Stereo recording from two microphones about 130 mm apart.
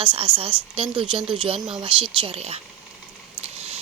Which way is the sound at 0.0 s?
40° right (ahead or behind).